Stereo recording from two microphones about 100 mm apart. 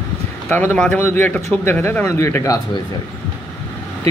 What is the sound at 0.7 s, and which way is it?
Speech, 10° left (ahead or behind).